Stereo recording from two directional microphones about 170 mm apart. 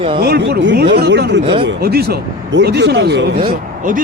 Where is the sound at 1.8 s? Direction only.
70° right (ahead or behind).